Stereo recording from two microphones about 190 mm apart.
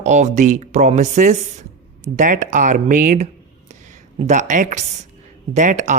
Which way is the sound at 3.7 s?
40° right (ahead or behind).